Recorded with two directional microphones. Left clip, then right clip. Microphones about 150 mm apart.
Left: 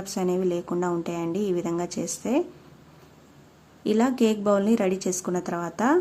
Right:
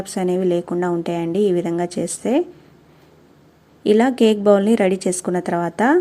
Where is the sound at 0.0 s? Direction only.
25° right (ahead or behind).